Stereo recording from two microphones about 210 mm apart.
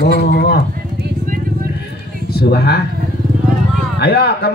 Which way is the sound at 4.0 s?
50° left (ahead or behind).